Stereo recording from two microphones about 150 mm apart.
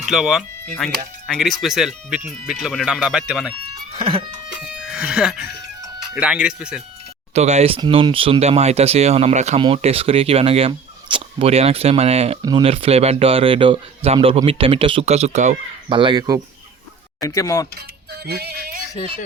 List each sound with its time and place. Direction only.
0.0 s speech: 5° right (ahead or behind)
3.9 s a man's voice: 40° right (ahead or behind)
4.6 s speech: 5° right (ahead or behind)
7.3 s speech: 45° right (ahead or behind)
7.8 s speech: 35° right (ahead or behind); by 9.6 s 50° right (ahead or behind)
9.6 s a man's voice: 40° right (ahead or behind)
12.4 s speech: 30° right (ahead or behind)
12.6 s a man's voice: 40° right (ahead or behind)
15.9 s speech: 35° right (ahead or behind)
17.2 s speech: 25° left (ahead or behind)
17.7 s music: 90° right